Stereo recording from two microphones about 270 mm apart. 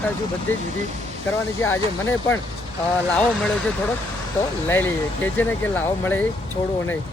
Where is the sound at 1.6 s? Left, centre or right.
Centre.